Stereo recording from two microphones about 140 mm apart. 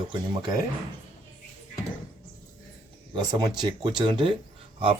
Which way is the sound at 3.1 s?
30° right (ahead or behind).